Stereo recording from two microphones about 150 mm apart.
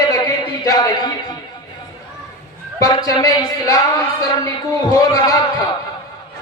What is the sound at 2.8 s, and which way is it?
Speech, 25° left (ahead or behind).